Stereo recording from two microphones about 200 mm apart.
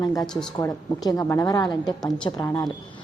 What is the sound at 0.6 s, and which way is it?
A woman's voice, 20° left (ahead or behind).